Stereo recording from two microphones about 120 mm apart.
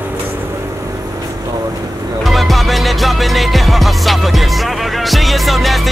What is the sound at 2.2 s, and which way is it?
Music, centre (ahead or behind).